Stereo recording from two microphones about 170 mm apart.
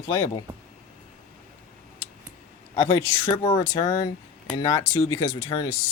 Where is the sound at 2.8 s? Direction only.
20° left (ahead or behind).